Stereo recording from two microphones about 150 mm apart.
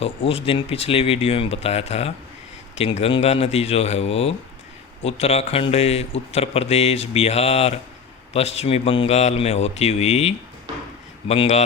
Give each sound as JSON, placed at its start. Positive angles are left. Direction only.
{"t": 0.0, "sound": "speech", "side_deg": 40}